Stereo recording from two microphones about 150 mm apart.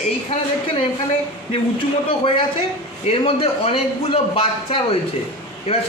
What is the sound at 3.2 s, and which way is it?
A man's voice, 40° left (ahead or behind).